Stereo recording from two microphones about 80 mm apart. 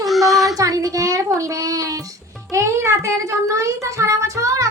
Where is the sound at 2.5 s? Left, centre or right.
Right.